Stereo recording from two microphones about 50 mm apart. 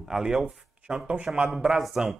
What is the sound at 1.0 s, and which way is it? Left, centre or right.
Speech, right.